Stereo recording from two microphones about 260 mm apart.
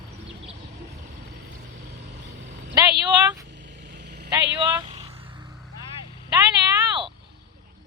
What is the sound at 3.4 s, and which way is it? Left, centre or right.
Vehicle, right.